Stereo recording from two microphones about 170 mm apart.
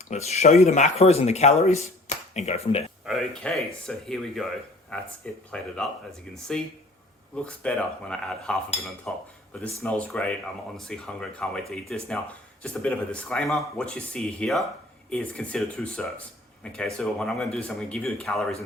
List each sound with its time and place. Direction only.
0.1 s speech: 40° left (ahead or behind)
3.1 s speech: centre (ahead or behind)